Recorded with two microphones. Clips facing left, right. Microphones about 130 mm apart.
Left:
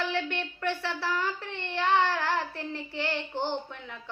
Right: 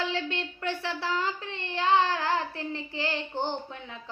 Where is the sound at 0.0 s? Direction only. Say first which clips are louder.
Even; 25° right (ahead or behind).